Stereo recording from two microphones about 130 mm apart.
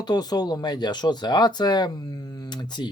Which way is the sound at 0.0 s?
30° left (ahead or behind).